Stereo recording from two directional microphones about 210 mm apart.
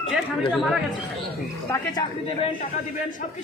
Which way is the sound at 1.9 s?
20° left (ahead or behind).